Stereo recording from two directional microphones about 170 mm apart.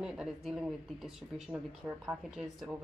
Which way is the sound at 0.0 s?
Centre (ahead or behind).